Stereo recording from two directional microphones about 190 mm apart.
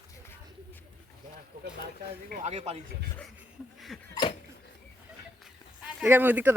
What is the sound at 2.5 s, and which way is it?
Speech, 35° right (ahead or behind).